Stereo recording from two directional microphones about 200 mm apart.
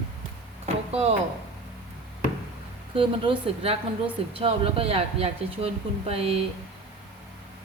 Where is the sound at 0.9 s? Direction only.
30° right (ahead or behind).